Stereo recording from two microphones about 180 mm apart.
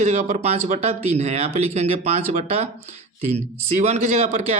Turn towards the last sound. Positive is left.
turn(degrees=-35)  # may be behind; listen again after turning